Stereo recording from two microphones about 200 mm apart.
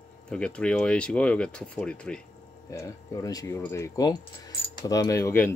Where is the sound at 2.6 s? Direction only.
15° left (ahead or behind).